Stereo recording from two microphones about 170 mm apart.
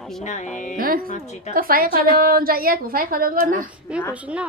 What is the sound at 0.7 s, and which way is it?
A woman's voice, 60° right (ahead or behind).